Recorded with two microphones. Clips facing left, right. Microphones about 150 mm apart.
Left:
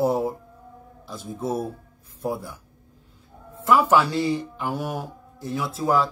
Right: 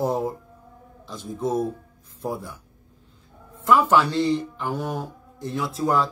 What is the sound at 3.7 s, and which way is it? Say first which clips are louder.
Speech: even; 10° left (ahead or behind).